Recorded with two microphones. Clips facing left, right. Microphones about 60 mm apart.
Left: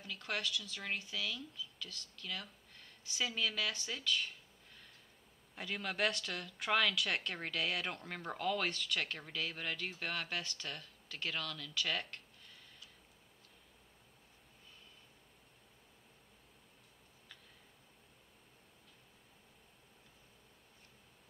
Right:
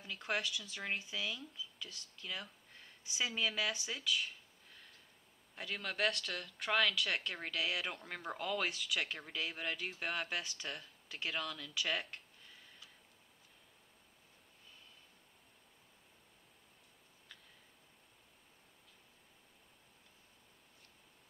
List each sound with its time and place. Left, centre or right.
0.0 s speech: centre
5.6 s speech: centre